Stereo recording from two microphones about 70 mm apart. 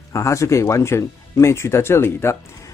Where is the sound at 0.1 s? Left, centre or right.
Left.